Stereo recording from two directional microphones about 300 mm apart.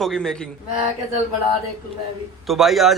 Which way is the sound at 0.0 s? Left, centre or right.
Centre.